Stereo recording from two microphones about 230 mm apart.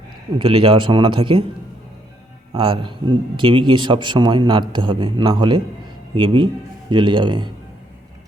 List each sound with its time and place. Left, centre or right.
0.3 s speech: right
2.5 s speech: right